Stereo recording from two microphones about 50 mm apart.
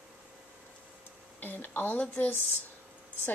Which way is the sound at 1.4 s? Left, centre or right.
Left.